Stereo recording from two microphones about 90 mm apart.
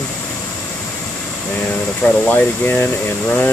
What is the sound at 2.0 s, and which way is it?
Speech, 20° left (ahead or behind).